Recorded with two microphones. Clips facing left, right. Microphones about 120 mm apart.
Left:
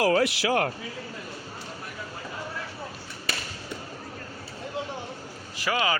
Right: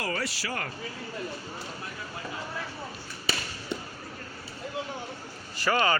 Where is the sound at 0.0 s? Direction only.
70° left (ahead or behind).